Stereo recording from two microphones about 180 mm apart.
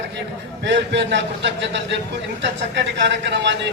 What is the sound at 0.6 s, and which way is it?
A man's voice, 75° right (ahead or behind).